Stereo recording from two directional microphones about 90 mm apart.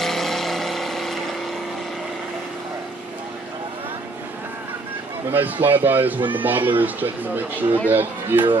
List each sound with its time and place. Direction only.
0.0 s vehicle: 5° left (ahead or behind)
5.3 s speech: 20° right (ahead or behind)